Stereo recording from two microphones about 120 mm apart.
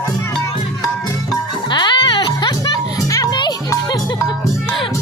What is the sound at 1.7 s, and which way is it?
Music, 40° left (ahead or behind).